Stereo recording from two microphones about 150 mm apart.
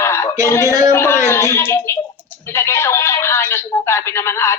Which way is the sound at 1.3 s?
15° left (ahead or behind).